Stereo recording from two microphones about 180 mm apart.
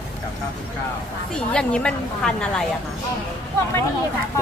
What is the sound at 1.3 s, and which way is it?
A woman's voice, 5° left (ahead or behind).